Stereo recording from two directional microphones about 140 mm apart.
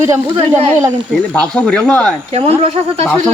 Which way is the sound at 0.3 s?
50° right (ahead or behind).